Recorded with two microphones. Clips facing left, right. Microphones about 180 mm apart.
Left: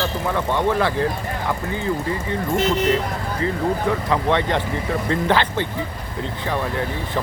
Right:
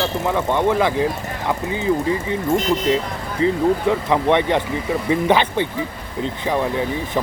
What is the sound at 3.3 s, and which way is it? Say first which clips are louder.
Speech: right 6 dB; 20° right (ahead or behind).